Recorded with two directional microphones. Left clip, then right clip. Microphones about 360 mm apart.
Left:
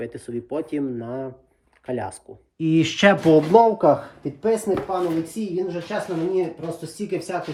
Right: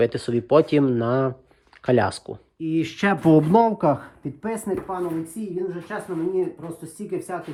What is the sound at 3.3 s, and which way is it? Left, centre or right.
Speech, centre.